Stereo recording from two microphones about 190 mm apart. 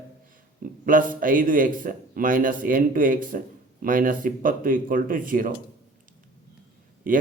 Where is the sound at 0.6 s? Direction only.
45° right (ahead or behind).